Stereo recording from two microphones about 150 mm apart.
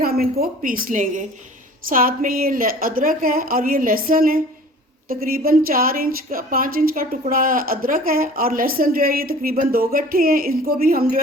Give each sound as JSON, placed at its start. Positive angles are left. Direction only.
{"t": 0.0, "sound": "a woman's voice", "side_deg": -85}